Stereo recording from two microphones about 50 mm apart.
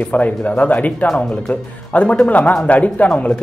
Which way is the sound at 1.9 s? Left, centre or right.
Left.